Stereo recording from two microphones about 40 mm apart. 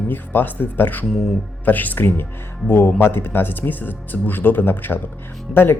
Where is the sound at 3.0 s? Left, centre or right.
Left.